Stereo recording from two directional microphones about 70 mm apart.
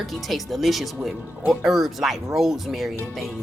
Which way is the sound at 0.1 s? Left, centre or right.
Centre.